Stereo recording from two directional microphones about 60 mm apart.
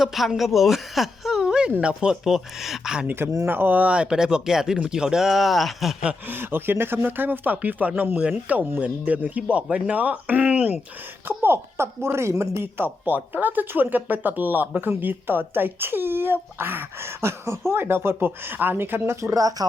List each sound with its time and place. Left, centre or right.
0.0 s a woman's voice: centre
3.4 s speech: right; by 6.0 s centre
6.2 s speech: right
11.3 s speech: right
12.5 s speech: right
19.2 s speech: right